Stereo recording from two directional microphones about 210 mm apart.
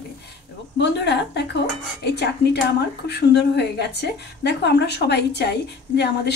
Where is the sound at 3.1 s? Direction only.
55° left (ahead or behind).